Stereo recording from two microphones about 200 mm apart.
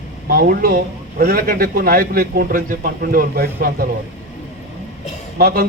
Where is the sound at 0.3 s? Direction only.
50° right (ahead or behind).